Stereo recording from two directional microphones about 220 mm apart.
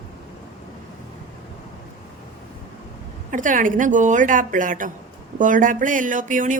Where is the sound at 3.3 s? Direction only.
35° right (ahead or behind).